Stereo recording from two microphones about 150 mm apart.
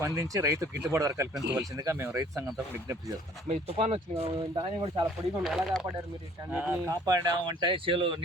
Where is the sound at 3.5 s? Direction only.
45° right (ahead or behind).